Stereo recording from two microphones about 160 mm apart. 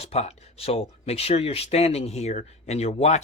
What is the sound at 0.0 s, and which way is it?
Speech, 40° left (ahead or behind).